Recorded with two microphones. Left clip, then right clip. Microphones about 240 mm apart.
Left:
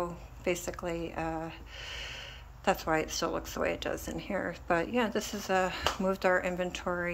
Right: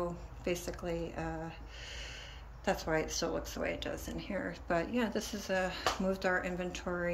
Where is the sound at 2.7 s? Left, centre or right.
Centre.